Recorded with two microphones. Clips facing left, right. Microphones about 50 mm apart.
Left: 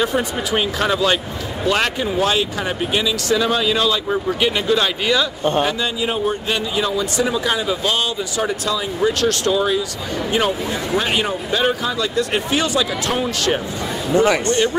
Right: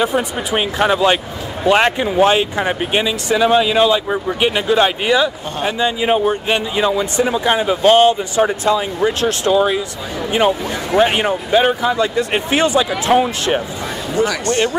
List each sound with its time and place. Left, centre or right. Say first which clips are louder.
0.0 s speech: right 2 dB; centre
10.9 s speech: right 7 dB; right
14.1 s speech: left 3 dB; left
14.5 s speech: right 1 dB; right